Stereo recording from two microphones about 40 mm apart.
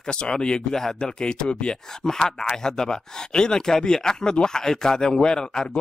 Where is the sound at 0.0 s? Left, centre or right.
Left.